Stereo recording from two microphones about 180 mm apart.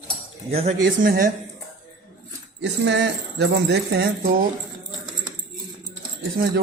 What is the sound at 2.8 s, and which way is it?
Speech, 75° right (ahead or behind).